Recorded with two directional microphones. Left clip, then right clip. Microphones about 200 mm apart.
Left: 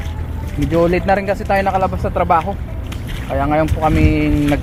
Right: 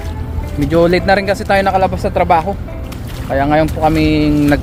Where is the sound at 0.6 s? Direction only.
Centre (ahead or behind).